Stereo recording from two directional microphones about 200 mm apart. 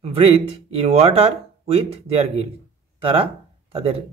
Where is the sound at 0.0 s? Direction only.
30° right (ahead or behind).